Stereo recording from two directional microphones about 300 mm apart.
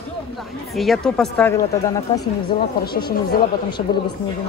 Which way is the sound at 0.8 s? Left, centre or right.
Centre.